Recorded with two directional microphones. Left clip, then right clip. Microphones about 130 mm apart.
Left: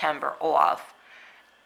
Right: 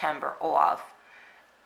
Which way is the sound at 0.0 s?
25° left (ahead or behind).